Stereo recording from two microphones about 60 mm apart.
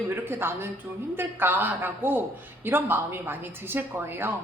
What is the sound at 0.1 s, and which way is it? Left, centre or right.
A woman's voice, right.